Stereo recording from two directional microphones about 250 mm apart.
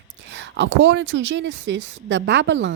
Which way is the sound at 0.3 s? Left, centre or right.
Right.